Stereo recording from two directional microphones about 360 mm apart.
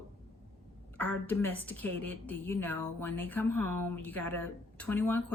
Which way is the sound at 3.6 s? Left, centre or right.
Right.